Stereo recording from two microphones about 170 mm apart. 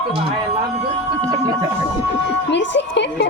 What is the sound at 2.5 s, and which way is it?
Speech, 90° left.